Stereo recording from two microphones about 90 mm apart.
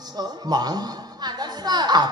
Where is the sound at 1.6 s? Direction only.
50° right (ahead or behind).